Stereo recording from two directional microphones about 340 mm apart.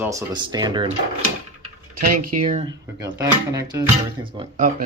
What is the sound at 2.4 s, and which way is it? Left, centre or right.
Speech, right.